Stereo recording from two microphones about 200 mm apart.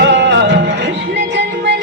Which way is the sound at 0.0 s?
60° right (ahead or behind).